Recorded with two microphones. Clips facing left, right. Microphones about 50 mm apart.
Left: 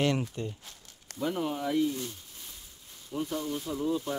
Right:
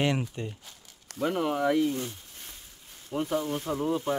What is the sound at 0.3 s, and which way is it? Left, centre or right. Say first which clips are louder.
Rub: even; right.